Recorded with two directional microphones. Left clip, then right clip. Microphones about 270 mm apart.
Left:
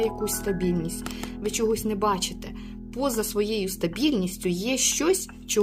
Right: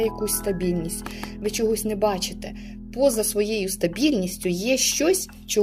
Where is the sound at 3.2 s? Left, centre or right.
Centre.